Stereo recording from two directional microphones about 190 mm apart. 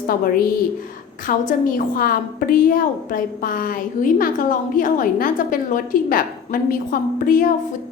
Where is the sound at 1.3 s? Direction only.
45° left (ahead or behind).